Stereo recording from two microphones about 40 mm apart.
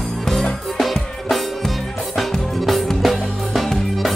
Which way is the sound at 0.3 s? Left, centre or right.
Centre.